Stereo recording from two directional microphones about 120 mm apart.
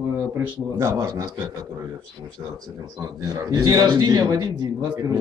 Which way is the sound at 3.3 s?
20° right (ahead or behind).